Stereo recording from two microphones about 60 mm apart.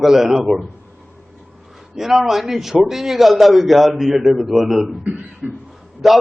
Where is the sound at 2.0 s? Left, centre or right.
Centre.